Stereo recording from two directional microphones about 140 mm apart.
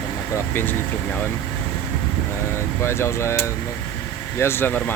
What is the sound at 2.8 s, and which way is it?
Speech, 20° left (ahead or behind).